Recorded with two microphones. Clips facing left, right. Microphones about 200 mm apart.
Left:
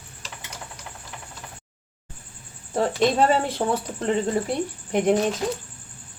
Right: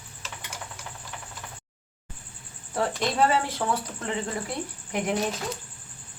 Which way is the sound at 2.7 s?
25° left (ahead or behind).